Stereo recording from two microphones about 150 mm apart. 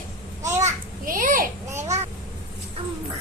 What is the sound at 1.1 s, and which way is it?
Children playing, 65° right (ahead or behind).